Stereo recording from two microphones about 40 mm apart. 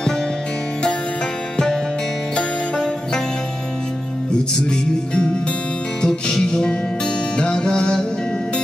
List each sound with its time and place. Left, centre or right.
4.6 s music: left